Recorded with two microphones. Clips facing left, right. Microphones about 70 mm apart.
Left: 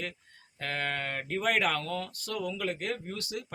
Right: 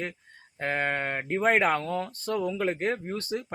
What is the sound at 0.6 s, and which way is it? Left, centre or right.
Speech, right.